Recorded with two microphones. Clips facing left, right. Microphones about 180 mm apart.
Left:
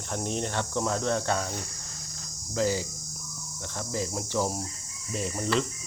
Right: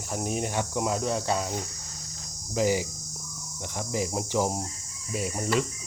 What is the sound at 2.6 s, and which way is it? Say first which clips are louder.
Cricket: right 2 dB; 15° right (ahead or behind).